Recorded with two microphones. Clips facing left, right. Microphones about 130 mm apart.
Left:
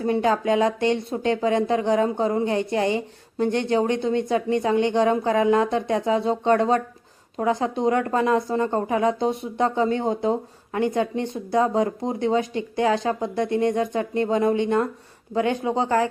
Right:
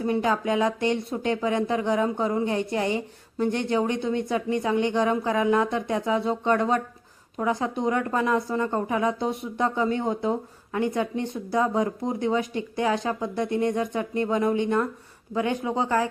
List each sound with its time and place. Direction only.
0.0 s speech: 30° left (ahead or behind)